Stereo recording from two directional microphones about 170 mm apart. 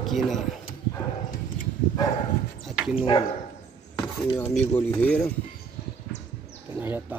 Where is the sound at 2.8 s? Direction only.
5° right (ahead or behind).